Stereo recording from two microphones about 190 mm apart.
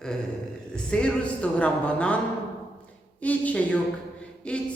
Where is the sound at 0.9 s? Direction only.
5° left (ahead or behind).